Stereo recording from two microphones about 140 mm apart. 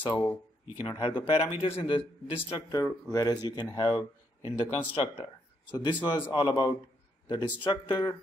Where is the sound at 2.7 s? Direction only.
25° left (ahead or behind).